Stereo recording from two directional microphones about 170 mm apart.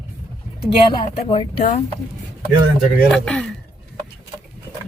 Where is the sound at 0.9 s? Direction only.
30° left (ahead or behind).